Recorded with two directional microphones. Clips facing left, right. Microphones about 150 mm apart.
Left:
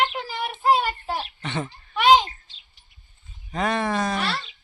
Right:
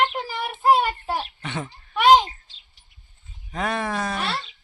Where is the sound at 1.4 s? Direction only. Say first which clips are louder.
Left 2 dB; 5° right (ahead or behind).